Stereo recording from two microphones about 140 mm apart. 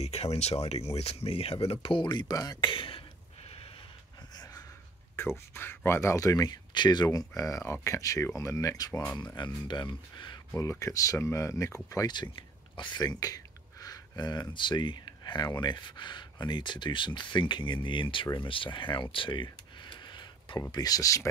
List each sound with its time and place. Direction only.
0.0 s speech: 45° left (ahead or behind)
5.5 s speech: 15° left (ahead or behind); by 10.4 s 35° left (ahead or behind)
10.5 s speech: 20° left (ahead or behind)
19.1 s a sound: 35° left (ahead or behind)
20.7 s speech: 25° left (ahead or behind)